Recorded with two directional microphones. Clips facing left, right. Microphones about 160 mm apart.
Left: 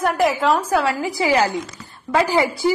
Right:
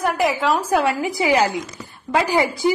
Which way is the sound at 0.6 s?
20° right (ahead or behind).